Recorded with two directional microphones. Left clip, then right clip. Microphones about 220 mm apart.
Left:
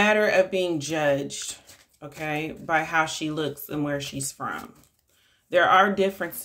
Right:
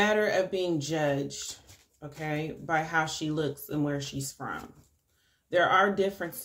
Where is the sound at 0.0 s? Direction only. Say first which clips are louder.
Left 6 dB; 25° left (ahead or behind).